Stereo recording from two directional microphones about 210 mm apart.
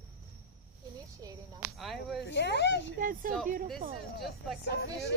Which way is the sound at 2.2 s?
55° left (ahead or behind).